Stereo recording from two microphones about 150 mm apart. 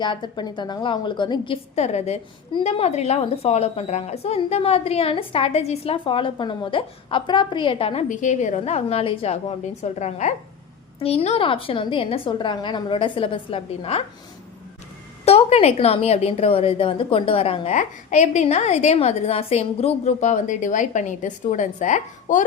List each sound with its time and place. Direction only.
0.0 s a woman's voice: 30° left (ahead or behind)
1.7 s a woman's voice: 45° left (ahead or behind)
8.0 s a woman's voice: 55° left (ahead or behind); by 14.0 s 40° left (ahead or behind)
15.2 s a woman's voice: 45° left (ahead or behind)
17.7 s a woman's voice: 55° left (ahead or behind)